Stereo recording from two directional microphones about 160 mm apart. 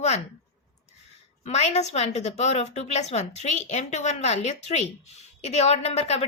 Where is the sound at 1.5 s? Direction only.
45° left (ahead or behind).